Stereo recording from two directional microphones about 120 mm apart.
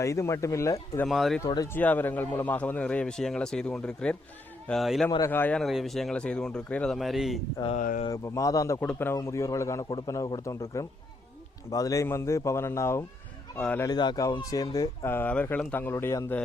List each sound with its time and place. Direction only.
0.0 s a man's voice: 25° left (ahead or behind)
1.0 s speech: centre (ahead or behind)
1.5 s speech: 35° left (ahead or behind)
1.7 s a man's voice: 15° left (ahead or behind)
5.3 s a man's voice: 15° left (ahead or behind)
5.6 s speech: centre (ahead or behind)
8.1 s a man's voice: 25° left (ahead or behind)
8.8 s a man's voice: 15° left (ahead or behind)
13.6 s a man's voice: 10° left (ahead or behind)
13.8 s speech: 35° left (ahead or behind)
15.0 s a man's voice: 20° left (ahead or behind)